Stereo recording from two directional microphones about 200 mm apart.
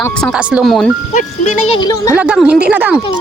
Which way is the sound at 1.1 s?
35° left (ahead or behind).